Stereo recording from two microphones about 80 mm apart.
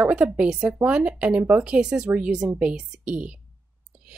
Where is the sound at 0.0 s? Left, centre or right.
Centre.